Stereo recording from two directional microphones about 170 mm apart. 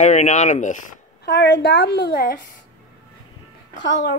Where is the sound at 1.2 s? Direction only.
75° left (ahead or behind).